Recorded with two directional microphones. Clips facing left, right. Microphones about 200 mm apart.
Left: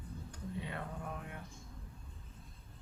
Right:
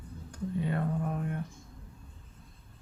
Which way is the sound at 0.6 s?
45° right (ahead or behind).